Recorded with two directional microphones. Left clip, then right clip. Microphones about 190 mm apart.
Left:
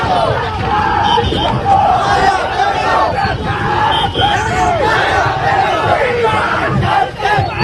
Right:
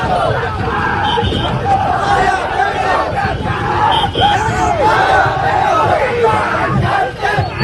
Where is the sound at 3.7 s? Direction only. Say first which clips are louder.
Right 1 dB; centre (ahead or behind).